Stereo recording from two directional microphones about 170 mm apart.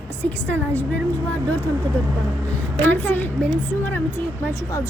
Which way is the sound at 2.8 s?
10° left (ahead or behind).